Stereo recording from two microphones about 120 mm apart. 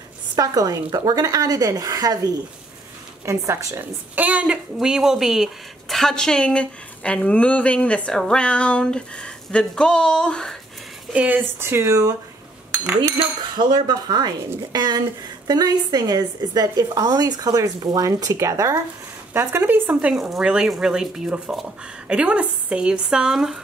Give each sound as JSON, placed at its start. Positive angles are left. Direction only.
{"t": 0.4, "sound": "a woman's voice", "side_deg": -30}
{"t": 11.1, "sound": "speech", "side_deg": -15}
{"t": 13.6, "sound": "a woman's voice", "side_deg": -35}